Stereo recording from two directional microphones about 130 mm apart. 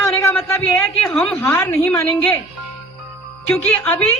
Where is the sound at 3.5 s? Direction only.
10° left (ahead or behind).